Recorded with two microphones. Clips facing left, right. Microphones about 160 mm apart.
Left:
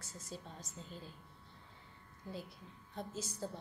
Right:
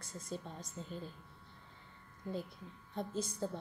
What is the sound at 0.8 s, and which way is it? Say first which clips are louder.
Speech: right 6 dB; 45° right (ahead or behind).